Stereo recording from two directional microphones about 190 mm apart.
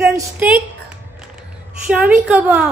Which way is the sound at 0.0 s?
10° right (ahead or behind).